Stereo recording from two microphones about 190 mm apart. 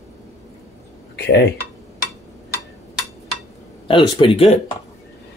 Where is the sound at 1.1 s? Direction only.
65° left (ahead or behind).